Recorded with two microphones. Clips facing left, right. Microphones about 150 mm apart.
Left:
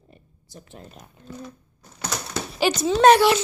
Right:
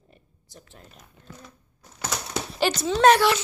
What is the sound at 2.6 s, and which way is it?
Speech, 10° left (ahead or behind).